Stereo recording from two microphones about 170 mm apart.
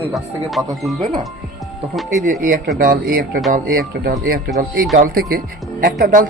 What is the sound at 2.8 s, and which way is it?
Speech, 60° right (ahead or behind).